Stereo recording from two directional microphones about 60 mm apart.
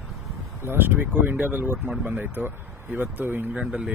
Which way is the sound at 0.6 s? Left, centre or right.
Right.